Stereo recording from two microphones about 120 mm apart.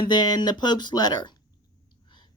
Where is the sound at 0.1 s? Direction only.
35° left (ahead or behind).